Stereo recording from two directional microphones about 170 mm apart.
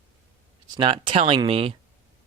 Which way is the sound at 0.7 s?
30° right (ahead or behind).